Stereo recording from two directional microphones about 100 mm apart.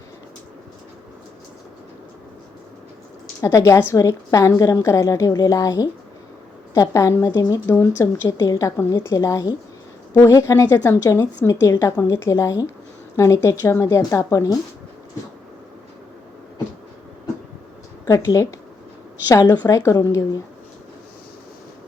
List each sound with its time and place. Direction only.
3.4 s a woman's voice: 30° left (ahead or behind)
18.1 s speech: 35° left (ahead or behind)